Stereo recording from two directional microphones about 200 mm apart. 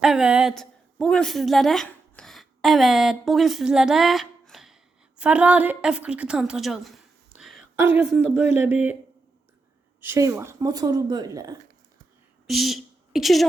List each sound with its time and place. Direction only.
0.0 s speech: 5° right (ahead or behind)
10.0 s speech: 15° right (ahead or behind)
12.5 s a woman's voice: centre (ahead or behind)